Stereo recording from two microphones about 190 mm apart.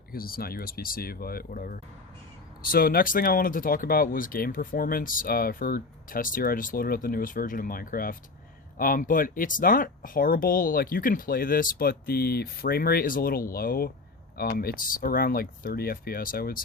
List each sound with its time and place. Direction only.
0.1 s speech: 50° left (ahead or behind)